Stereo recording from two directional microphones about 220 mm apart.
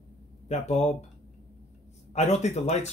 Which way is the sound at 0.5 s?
30° left (ahead or behind).